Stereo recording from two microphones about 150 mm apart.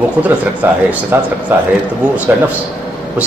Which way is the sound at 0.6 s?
15° right (ahead or behind).